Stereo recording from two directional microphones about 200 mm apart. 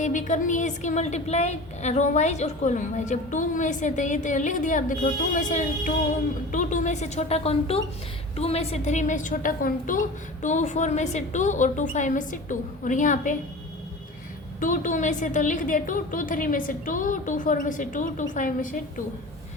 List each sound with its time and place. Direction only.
0.0 s a woman's voice: 40° left (ahead or behind)
14.6 s a woman's voice: 40° left (ahead or behind)